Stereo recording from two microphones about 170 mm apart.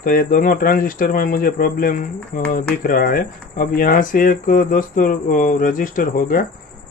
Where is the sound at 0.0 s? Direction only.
55° left (ahead or behind).